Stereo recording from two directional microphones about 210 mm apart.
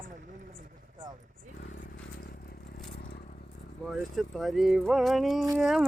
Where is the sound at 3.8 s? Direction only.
Centre (ahead or behind).